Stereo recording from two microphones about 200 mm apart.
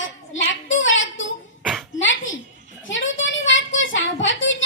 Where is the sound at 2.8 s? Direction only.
70° left (ahead or behind).